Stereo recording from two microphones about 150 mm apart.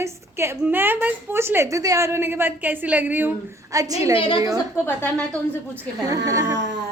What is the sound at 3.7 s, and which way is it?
Speech, 25° right (ahead or behind).